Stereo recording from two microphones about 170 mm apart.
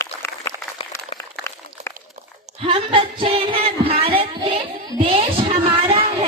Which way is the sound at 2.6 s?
30° right (ahead or behind).